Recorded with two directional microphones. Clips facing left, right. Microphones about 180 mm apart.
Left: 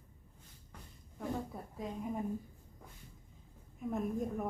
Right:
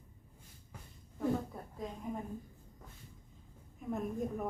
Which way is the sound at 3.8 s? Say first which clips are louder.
Left 1 dB; centre (ahead or behind).